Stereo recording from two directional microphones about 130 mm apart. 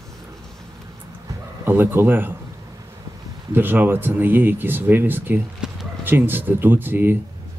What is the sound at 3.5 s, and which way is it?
Speech, 15° right (ahead or behind).